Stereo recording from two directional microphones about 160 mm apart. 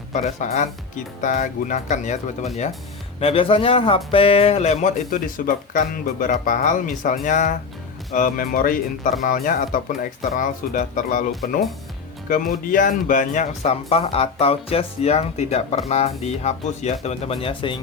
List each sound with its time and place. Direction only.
0.1 s speech: 50° left (ahead or behind)
3.2 s speech: 35° left (ahead or behind); by 11.3 s 55° left (ahead or behind)
12.3 s speech: 55° left (ahead or behind); by 17.7 s 30° left (ahead or behind)